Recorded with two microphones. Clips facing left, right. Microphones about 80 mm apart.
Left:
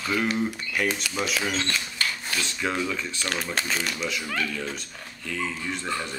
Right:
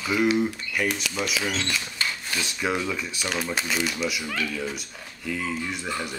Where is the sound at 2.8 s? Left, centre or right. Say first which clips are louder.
Even; centre.